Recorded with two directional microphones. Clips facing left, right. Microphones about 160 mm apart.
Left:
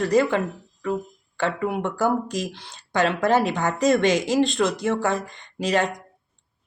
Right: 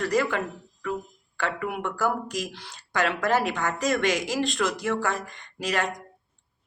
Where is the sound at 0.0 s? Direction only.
25° left (ahead or behind).